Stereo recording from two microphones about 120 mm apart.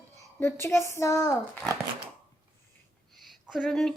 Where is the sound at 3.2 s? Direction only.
Centre (ahead or behind).